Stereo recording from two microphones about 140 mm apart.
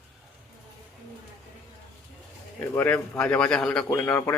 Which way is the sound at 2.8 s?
10° left (ahead or behind).